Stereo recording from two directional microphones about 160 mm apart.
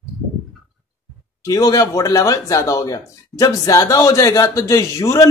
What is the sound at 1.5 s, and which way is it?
A man's voice, 20° left (ahead or behind).